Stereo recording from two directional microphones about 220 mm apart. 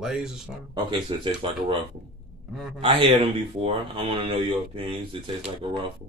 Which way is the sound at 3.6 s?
25° right (ahead or behind).